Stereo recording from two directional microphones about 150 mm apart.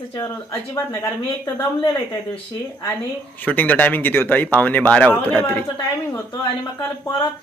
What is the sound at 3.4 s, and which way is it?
Speech, 10° left (ahead or behind).